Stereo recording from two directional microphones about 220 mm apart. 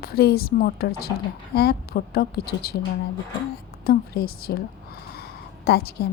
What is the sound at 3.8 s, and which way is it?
Speech, 45° left (ahead or behind).